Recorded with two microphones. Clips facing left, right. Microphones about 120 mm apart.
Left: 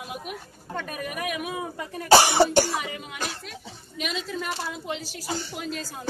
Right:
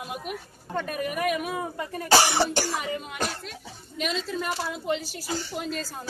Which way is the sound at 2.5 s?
50° left (ahead or behind).